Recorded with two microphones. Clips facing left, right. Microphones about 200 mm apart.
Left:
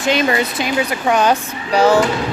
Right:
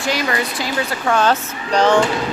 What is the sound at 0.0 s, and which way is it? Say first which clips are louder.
Speech: left 4 dB; 20° left (ahead or behind).